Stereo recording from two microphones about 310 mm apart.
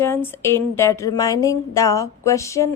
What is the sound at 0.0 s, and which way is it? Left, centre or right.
Speech, centre.